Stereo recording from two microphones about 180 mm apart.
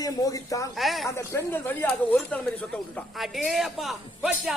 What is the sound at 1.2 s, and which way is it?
A man's voice, 10° left (ahead or behind).